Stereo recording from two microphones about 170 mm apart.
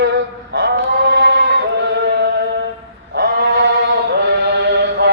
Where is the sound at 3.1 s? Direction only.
75° right (ahead or behind).